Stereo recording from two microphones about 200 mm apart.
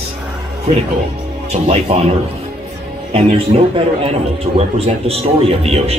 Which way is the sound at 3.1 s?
30° right (ahead or behind).